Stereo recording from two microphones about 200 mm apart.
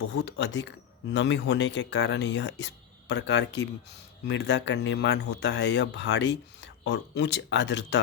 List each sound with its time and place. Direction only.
0.1 s speech: 60° left (ahead or behind)